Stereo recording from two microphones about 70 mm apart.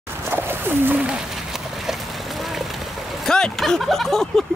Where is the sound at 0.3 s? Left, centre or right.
Right.